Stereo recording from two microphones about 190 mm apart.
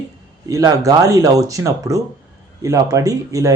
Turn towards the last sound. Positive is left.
turn(degrees=-15)  # may be behind; listen again after turning